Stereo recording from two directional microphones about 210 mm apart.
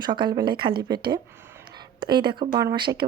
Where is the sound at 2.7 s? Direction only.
20° right (ahead or behind).